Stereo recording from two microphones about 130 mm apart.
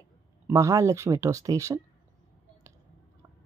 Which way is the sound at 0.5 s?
25° right (ahead or behind).